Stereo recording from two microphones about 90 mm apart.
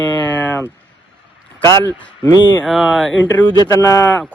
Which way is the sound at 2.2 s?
50° left (ahead or behind).